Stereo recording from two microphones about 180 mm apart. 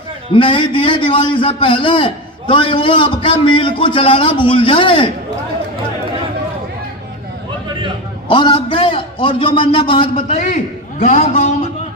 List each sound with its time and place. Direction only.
0.3 s a man's voice: 30° left (ahead or behind)
8.3 s a man's voice: 25° left (ahead or behind)
10.2 s a man's voice: 40° left (ahead or behind)